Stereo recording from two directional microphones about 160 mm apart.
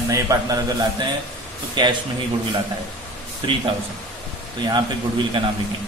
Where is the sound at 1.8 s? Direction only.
30° right (ahead or behind).